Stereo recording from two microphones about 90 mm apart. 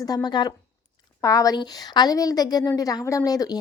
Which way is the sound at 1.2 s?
40° left (ahead or behind).